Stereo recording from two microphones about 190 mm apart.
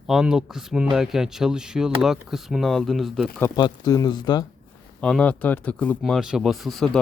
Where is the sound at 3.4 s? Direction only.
20° left (ahead or behind).